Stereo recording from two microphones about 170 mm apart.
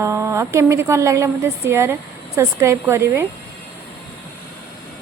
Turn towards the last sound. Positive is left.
turn(degrees=-15)  # may be behind; listen again after turning